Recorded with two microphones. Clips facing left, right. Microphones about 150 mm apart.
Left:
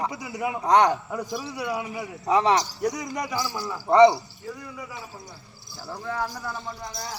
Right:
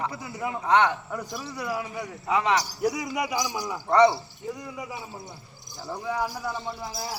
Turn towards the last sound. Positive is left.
turn(degrees=-15)  # may be behind; listen again after turning